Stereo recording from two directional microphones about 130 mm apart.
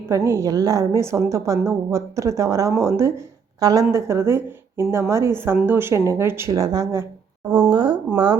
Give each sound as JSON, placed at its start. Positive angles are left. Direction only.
{"t": 0.1, "sound": "a woman's voice", "side_deg": -25}
{"t": 7.7, "sound": "speech", "side_deg": -35}